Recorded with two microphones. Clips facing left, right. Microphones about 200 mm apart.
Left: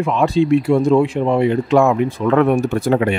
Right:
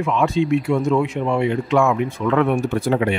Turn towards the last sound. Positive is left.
turn(degrees=45)  # may be behind; listen again after turning